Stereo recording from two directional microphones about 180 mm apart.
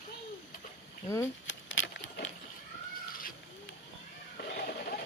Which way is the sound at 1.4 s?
90° left.